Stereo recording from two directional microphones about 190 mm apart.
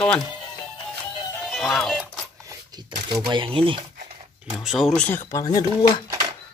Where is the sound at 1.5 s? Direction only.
Centre (ahead or behind).